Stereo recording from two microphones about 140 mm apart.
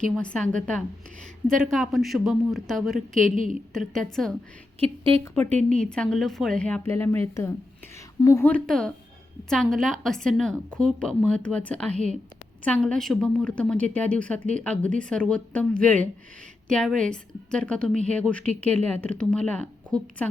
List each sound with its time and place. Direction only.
0.2 s a woman's voice: 10° left (ahead or behind)
3.2 s a woman's voice: 65° right (ahead or behind)
3.9 s a man's voice: centre (ahead or behind)
4.8 s a woman's voice: 40° right (ahead or behind)
5.3 s a woman's voice: 10° left (ahead or behind)
8.4 s a woman's voice: 5° left (ahead or behind)